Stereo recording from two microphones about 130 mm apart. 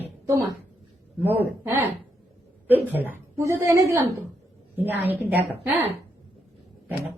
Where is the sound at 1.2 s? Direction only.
15° right (ahead or behind).